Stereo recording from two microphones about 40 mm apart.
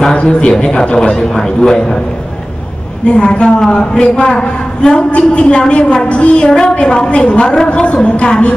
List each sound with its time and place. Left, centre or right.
0.1 s a woman's voice: left
3.1 s a woman's voice: left